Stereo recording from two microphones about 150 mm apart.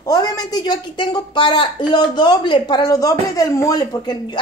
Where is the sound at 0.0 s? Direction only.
25° left (ahead or behind).